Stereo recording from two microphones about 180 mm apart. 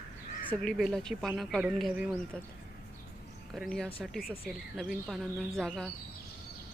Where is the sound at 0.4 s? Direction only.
5° left (ahead or behind).